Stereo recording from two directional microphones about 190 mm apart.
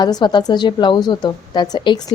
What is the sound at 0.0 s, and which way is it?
A woman's voice, 20° left (ahead or behind).